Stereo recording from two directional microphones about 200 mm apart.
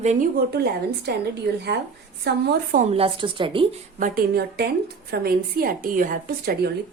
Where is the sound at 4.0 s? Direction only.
45° right (ahead or behind).